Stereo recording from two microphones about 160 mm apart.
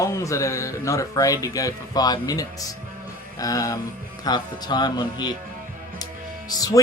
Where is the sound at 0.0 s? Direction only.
20° left (ahead or behind).